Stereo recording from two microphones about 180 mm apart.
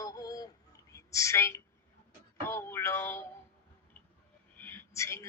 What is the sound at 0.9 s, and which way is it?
Speech, 15° left (ahead or behind).